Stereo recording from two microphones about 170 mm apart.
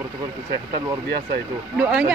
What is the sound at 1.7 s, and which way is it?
Speech, 5° right (ahead or behind).